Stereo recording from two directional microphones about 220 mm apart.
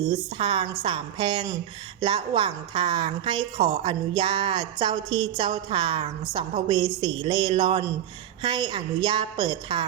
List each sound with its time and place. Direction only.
0.1 s a woman's voice: 20° right (ahead or behind)